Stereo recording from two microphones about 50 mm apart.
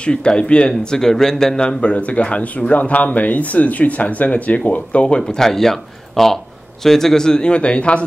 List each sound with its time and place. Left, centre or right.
0.0 s speech: centre
1.6 s speech: left